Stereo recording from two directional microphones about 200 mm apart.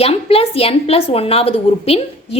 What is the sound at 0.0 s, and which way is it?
A woman's voice, 30° left (ahead or behind).